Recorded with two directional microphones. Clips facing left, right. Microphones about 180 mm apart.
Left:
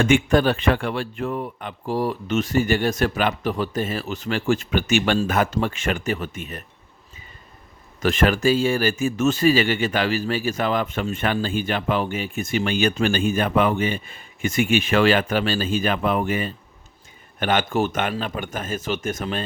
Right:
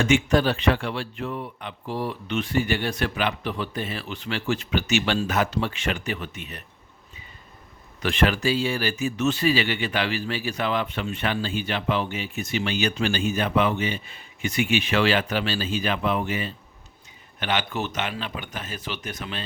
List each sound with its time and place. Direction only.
0.0 s speech: 55° left (ahead or behind)
8.0 s speech: 45° left (ahead or behind)